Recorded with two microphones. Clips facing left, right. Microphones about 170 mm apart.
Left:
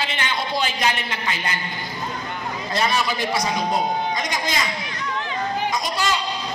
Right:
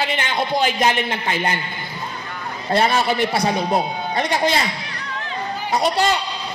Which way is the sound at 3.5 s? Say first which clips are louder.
Right 2 dB; 60° right (ahead or behind).